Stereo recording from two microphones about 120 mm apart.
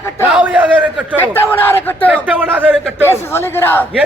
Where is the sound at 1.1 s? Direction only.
20° left (ahead or behind).